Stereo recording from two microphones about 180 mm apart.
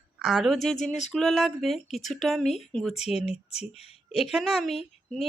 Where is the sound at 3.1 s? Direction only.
35° left (ahead or behind).